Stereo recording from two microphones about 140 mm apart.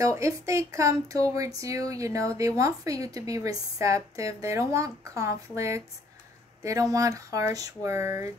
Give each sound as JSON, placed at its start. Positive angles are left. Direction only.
{"t": 0.0, "sound": "speech", "side_deg": -25}